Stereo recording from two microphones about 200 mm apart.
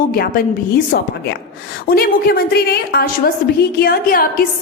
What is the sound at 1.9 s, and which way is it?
A woman's voice, 50° left (ahead or behind).